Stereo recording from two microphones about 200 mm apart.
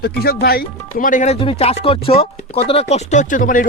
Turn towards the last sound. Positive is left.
turn(degrees=40)  # may be behind; listen again after turning